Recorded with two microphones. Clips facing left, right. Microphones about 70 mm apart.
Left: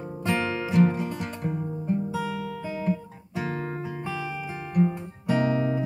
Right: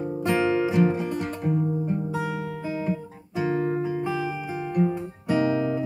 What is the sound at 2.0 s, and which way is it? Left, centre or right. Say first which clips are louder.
Guitar: right 1 dB; right.